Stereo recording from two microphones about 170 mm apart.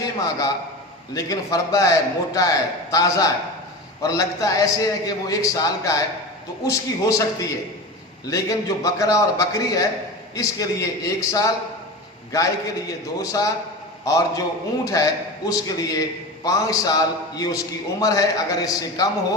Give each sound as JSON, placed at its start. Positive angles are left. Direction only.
{"t": 0.0, "sound": "a man's voice", "side_deg": 20}
{"t": 12.9, "sound": "a man's voice", "side_deg": 20}